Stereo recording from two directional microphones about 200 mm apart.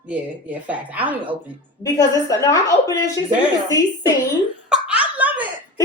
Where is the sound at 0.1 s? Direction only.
5° right (ahead or behind).